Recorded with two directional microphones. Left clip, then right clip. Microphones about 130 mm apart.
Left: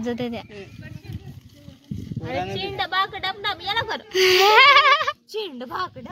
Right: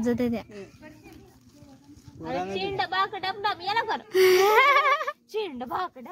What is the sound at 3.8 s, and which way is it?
Speech, 30° right (ahead or behind).